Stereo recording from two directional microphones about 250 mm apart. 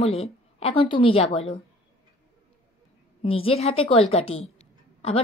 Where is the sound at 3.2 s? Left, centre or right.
Left.